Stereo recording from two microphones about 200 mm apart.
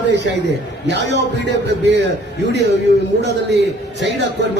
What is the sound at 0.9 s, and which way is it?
A man's voice, 60° right (ahead or behind).